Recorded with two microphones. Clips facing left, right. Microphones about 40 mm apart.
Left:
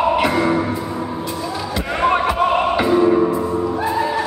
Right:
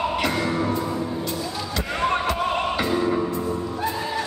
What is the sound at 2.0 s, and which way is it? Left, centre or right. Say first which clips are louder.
Music: left 7 dB; centre.